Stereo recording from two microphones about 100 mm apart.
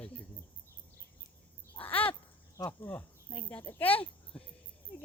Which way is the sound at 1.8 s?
15° left (ahead or behind).